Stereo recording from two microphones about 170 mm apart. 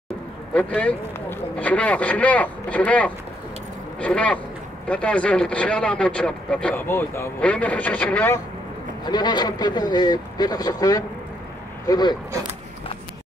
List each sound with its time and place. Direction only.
0.6 s speech: 10° left (ahead or behind)
9.0 s speech: 25° left (ahead or behind)